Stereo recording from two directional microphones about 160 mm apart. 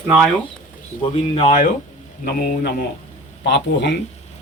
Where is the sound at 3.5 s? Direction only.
90° left.